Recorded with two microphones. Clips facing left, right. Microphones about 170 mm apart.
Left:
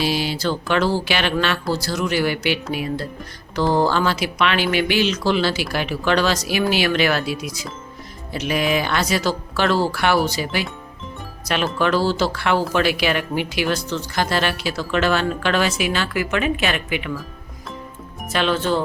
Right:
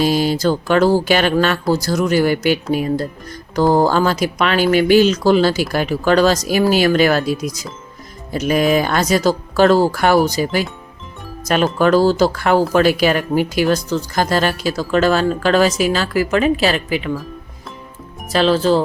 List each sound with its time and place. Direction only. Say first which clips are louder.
0.0 s mantra: right 6 dB; 45° right (ahead or behind)
3.5 s speech: right 5 dB; 45° right (ahead or behind)
8.3 s mantra: right 6 dB; 45° right (ahead or behind)
12.7 s speech: right 6 dB; 40° right (ahead or behind)
18.3 s speech: right 6 dB; 35° right (ahead or behind)